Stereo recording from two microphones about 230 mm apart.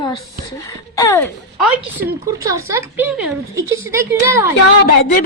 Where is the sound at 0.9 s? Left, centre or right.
Centre.